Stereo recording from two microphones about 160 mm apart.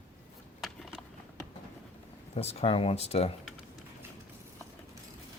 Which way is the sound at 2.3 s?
40° left (ahead or behind).